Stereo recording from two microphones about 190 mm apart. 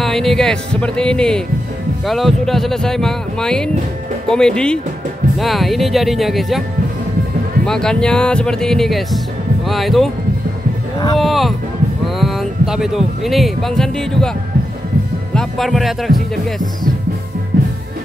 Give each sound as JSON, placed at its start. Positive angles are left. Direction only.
{"t": 0.0, "sound": "speech", "side_deg": 0}
{"t": 7.6, "sound": "speech", "side_deg": 5}
{"t": 11.1, "sound": "speech", "side_deg": 0}
{"t": 15.3, "sound": "speech", "side_deg": 0}
{"t": 17.5, "sound": "music", "side_deg": -50}